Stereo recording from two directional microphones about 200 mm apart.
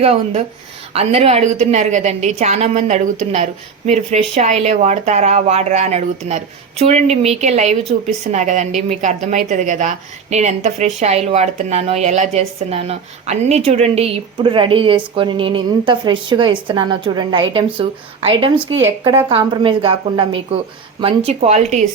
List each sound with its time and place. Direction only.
0.0 s a woman's voice: 30° right (ahead or behind)
18.8 s a woman's voice: 15° right (ahead or behind)
19.3 s a woman's voice: 25° right (ahead or behind)